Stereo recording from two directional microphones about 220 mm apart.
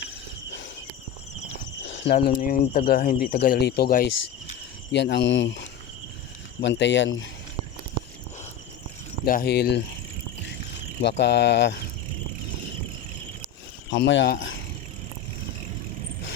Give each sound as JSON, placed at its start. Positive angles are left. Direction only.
{"t": 1.8, "sound": "cricket", "side_deg": 55}
{"t": 2.2, "sound": "speech", "side_deg": 45}
{"t": 9.2, "sound": "speech", "side_deg": 45}
{"t": 11.0, "sound": "speech", "side_deg": 50}
{"t": 13.9, "sound": "speech", "side_deg": 55}